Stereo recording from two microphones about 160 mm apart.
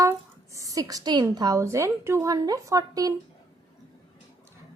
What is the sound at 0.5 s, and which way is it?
A woman's voice, 20° right (ahead or behind).